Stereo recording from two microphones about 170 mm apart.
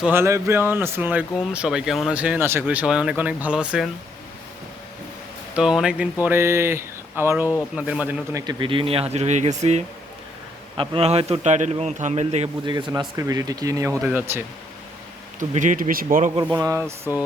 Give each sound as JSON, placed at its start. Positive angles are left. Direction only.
{"t": 0.0, "sound": "speech", "side_deg": -15}
{"t": 5.5, "sound": "speech", "side_deg": -5}
{"t": 8.3, "sound": "a man's voice", "side_deg": -20}
{"t": 13.0, "sound": "speech", "side_deg": -20}
{"t": 15.4, "sound": "speech", "side_deg": -50}
{"t": 16.3, "sound": "speech", "side_deg": -25}